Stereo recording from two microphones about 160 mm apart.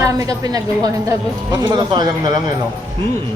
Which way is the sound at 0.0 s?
20° right (ahead or behind).